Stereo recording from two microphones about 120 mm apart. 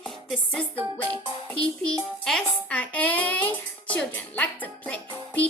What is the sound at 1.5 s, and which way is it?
A child's voice, 5° left (ahead or behind).